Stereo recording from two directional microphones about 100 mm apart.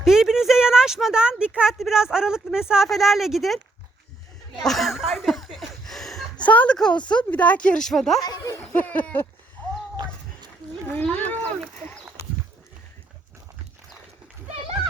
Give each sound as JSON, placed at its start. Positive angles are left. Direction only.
{"t": 0.0, "sound": "speech", "side_deg": -5}
{"t": 4.6, "sound": "chuckle", "side_deg": 0}
{"t": 6.4, "sound": "speech", "side_deg": 15}
{"t": 8.2, "sound": "speech", "side_deg": 40}
{"t": 8.5, "sound": "speech", "side_deg": 15}
{"t": 10.6, "sound": "a sound", "side_deg": -45}
{"t": 10.9, "sound": "speech", "side_deg": 15}